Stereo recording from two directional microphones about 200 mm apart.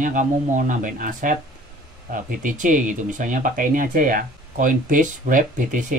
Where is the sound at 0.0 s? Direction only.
40° right (ahead or behind).